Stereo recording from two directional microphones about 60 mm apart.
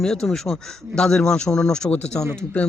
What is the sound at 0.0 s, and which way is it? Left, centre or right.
Speech, centre.